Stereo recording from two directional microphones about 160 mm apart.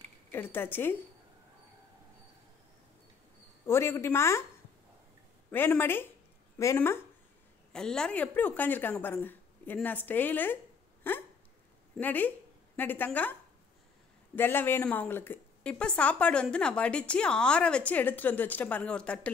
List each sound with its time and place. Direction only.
0.3 s a woman's voice: 15° left (ahead or behind)
3.6 s a woman's voice: 15° left (ahead or behind)
5.5 s a woman's voice: 15° left (ahead or behind)
7.7 s a woman's voice: 5° left (ahead or behind)
12.0 s a woman's voice: 10° left (ahead or behind)
14.3 s a woman's voice: 10° left (ahead or behind)